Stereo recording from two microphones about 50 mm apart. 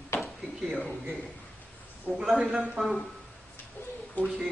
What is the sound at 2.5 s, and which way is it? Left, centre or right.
Speech, centre.